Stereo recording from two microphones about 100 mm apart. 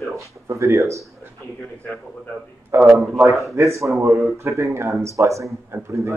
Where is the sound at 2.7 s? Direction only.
25° right (ahead or behind).